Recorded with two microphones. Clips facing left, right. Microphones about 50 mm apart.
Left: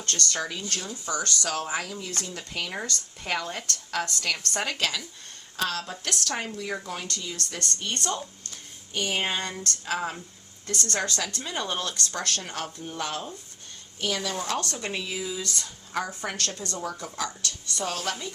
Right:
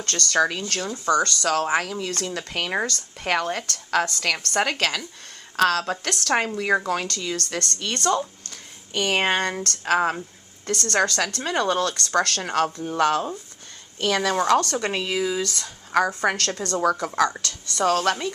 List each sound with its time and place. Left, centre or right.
0.0 s a woman's voice: right
3.7 s a woman's voice: right
5.5 s speech: right
8.4 s a sound: right
9.6 s a woman's voice: right
14.0 s speech: right